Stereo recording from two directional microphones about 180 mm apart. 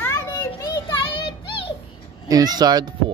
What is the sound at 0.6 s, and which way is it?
Music, 25° left (ahead or behind).